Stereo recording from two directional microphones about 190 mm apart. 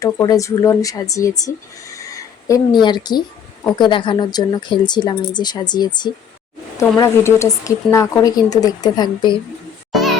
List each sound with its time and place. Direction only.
0.0 s speech: 20° left (ahead or behind)